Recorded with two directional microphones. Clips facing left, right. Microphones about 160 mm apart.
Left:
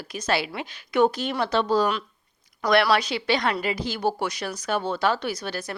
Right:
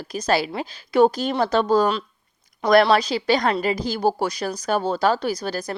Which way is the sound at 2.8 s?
30° right (ahead or behind).